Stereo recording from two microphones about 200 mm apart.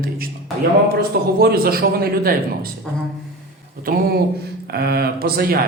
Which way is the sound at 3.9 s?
45° right (ahead or behind).